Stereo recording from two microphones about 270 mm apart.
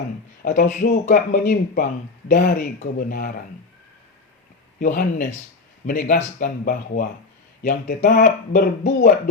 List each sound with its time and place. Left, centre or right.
0.4 s speech: left
4.8 s speech: left